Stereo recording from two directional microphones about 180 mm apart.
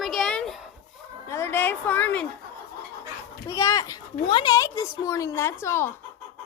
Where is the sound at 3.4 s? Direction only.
15° left (ahead or behind).